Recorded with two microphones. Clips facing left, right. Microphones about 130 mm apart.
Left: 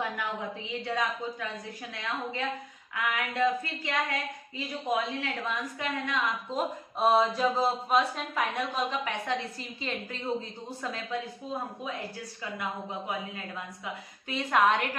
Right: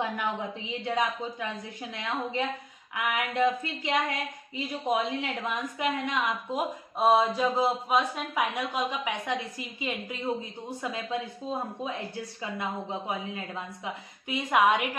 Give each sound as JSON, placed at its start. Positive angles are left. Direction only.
{"t": 0.0, "sound": "a woman's voice", "side_deg": -20}
{"t": 13.8, "sound": "speech", "side_deg": -15}